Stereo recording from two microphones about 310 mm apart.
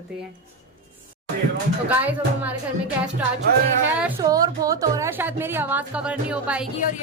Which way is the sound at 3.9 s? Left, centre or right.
Centre.